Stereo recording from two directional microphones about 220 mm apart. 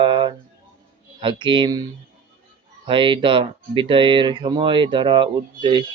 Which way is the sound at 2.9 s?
25° right (ahead or behind).